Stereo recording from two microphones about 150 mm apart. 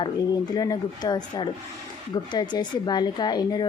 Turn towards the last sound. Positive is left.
turn(degrees=30)  # may be behind; listen again after turning